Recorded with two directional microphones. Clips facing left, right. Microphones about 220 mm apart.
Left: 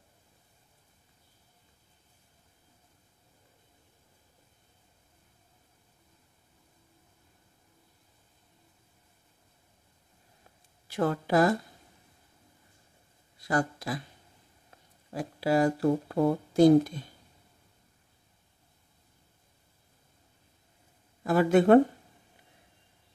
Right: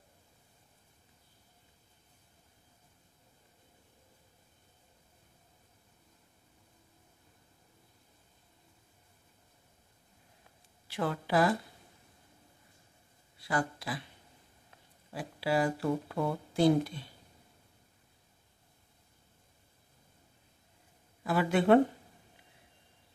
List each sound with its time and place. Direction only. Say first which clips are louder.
10.9 s speech: left 5 dB; 45° left (ahead or behind)
13.4 s speech: left 4 dB; 45° left (ahead or behind)
15.1 s speech: left 5 dB; 45° left (ahead or behind)
21.2 s speech: left 6 dB; 45° left (ahead or behind)